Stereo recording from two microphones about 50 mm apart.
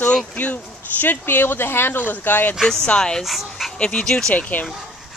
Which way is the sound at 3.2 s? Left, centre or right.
Centre.